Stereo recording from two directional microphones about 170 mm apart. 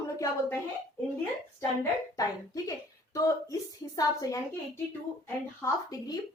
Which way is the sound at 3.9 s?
20° left (ahead or behind).